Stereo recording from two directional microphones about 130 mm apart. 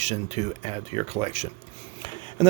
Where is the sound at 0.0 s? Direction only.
60° right (ahead or behind).